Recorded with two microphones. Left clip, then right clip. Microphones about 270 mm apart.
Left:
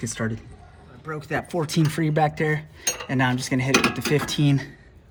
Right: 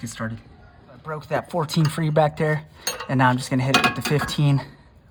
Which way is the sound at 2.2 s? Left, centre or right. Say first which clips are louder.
Right 3 dB; right.